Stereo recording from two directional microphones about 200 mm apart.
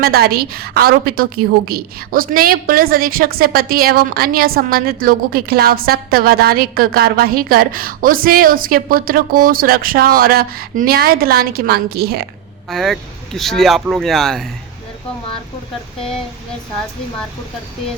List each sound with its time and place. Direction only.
0.0 s a woman's voice: 50° right (ahead or behind)
12.7 s speech: centre (ahead or behind)